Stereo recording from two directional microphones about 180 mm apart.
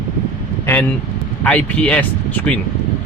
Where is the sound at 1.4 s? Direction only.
10° left (ahead or behind).